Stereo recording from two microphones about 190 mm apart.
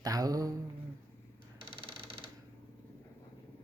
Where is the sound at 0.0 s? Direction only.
20° right (ahead or behind).